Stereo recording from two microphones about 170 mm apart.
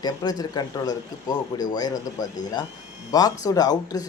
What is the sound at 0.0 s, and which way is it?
Speech, 25° left (ahead or behind).